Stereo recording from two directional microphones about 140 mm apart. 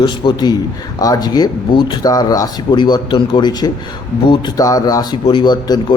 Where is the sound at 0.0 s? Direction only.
30° left (ahead or behind).